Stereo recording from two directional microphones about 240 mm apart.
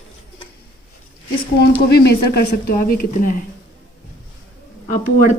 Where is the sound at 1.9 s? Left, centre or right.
Left.